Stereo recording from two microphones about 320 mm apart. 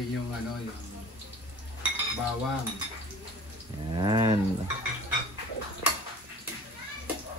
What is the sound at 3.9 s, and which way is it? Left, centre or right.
Speech, centre.